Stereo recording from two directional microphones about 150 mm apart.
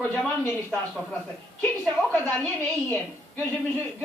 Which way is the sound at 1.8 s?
Centre (ahead or behind).